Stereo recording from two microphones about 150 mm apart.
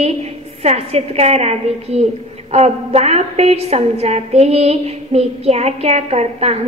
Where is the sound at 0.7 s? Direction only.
40° right (ahead or behind).